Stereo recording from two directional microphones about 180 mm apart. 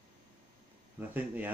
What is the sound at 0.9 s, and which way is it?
Speech, 10° right (ahead or behind).